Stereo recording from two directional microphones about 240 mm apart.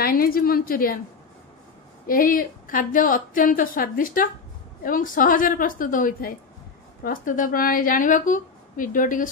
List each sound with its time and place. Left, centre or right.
0.0 s a woman's voice: left
2.0 s a woman's voice: left